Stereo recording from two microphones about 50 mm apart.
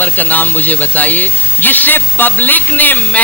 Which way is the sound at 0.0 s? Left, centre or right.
Left.